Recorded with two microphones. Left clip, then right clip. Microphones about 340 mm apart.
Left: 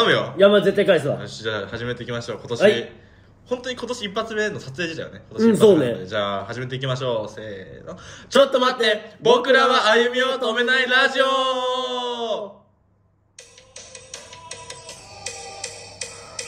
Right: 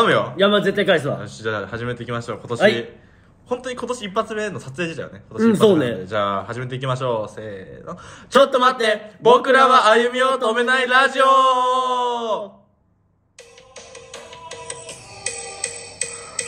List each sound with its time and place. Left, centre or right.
0.0 s speech: centre
15.0 s music: right